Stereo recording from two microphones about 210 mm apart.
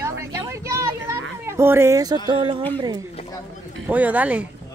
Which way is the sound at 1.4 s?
10° right (ahead or behind).